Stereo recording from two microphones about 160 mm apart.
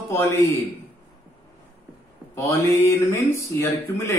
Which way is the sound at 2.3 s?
20° left (ahead or behind).